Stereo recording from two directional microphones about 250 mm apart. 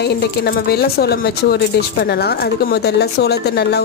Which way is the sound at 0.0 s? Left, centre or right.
Left.